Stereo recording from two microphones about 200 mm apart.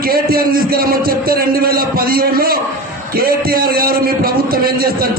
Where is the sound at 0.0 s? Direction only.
50° right (ahead or behind).